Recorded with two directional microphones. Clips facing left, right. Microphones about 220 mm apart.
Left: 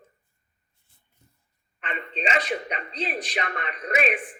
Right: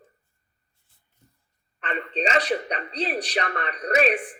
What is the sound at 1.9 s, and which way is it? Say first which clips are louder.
Speech: right 3 dB; 40° right (ahead or behind).